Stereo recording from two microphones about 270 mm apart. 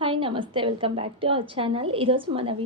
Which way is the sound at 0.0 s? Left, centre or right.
Centre.